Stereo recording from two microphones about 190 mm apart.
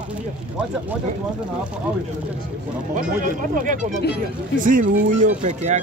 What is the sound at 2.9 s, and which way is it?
Speech, 45° right (ahead or behind).